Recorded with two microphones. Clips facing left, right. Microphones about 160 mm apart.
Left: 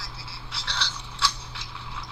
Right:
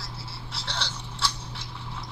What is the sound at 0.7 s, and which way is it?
Toothbrush, 50° right (ahead or behind).